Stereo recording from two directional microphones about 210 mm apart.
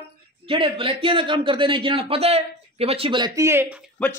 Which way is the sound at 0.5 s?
25° right (ahead or behind).